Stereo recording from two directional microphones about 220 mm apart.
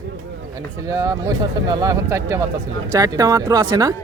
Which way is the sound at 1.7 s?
20° right (ahead or behind).